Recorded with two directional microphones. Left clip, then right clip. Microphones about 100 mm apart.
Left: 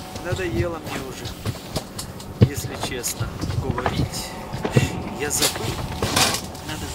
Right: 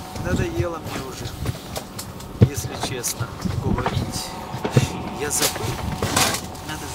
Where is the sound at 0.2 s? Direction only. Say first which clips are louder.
Even; 5° right (ahead or behind).